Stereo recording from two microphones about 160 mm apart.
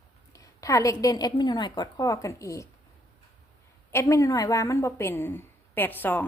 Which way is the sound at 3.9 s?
20° left (ahead or behind).